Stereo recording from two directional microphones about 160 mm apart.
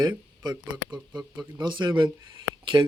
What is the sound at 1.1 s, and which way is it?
Speech, 5° right (ahead or behind).